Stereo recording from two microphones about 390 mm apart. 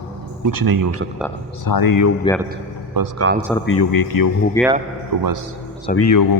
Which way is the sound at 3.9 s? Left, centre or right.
Left.